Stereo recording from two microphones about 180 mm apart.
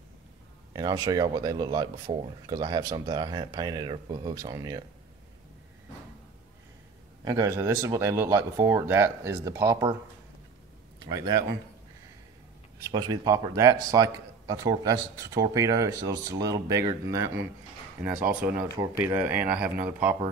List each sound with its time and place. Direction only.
0.7 s speech: 20° right (ahead or behind)
7.2 s speech: 15° right (ahead or behind)
11.0 s speech: 25° right (ahead or behind)
12.8 s speech: 20° right (ahead or behind)
18.8 s speech: 15° right (ahead or behind)